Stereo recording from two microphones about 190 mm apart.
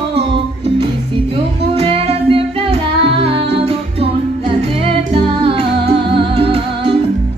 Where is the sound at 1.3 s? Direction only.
30° right (ahead or behind).